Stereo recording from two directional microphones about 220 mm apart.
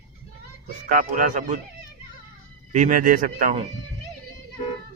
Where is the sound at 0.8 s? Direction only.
40° right (ahead or behind).